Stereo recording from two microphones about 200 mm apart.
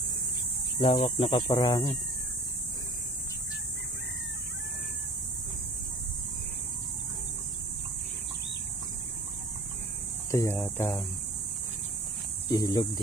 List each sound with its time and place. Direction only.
0.8 s speech: 30° left (ahead or behind)
10.3 s speech: 15° left (ahead or behind)
12.5 s speech: 20° left (ahead or behind)